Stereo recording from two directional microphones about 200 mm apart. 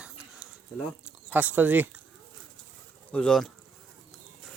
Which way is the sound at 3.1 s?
5° left (ahead or behind).